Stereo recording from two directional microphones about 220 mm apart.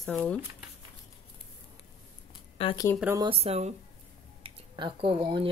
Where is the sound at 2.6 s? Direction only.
20° left (ahead or behind).